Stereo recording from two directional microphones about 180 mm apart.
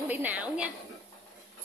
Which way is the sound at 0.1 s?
10° right (ahead or behind).